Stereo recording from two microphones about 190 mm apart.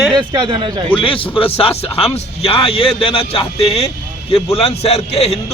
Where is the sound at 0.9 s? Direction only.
30° left (ahead or behind).